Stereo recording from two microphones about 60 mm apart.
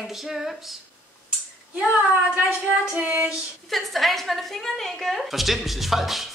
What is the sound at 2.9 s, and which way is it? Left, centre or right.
Child singing, right.